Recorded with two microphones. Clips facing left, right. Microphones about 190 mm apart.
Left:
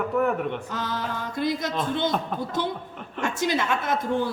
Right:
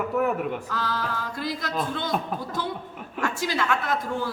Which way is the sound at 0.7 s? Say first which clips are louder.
Even; 20° left (ahead or behind).